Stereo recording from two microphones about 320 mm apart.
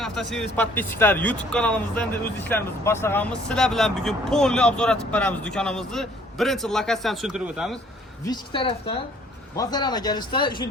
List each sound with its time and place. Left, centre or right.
0.0 s speech: centre
8.3 s speech: centre